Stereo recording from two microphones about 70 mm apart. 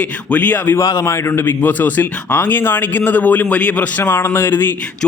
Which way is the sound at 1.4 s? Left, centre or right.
Left.